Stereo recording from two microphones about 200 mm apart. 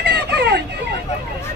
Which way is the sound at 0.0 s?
55° right (ahead or behind).